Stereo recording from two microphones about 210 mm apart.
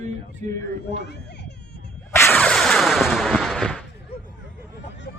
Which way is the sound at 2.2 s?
5° left (ahead or behind).